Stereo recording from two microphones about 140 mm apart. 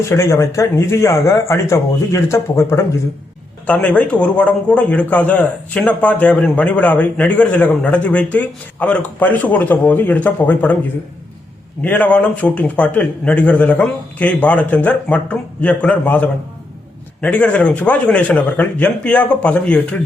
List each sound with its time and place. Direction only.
0.1 s a man's voice: 20° left (ahead or behind)
11.8 s a man's voice: 10° left (ahead or behind)